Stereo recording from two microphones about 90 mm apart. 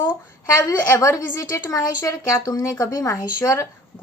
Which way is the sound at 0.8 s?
40° left (ahead or behind).